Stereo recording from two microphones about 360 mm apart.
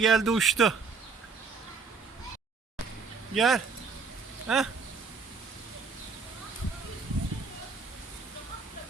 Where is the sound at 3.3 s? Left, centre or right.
Centre.